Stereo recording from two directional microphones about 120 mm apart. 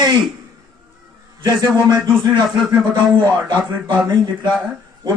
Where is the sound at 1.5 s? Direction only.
35° right (ahead or behind).